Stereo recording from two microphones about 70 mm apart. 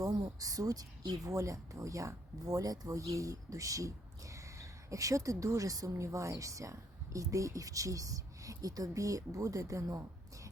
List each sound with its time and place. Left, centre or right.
0.0 s speech: right
5.9 s a woman's voice: right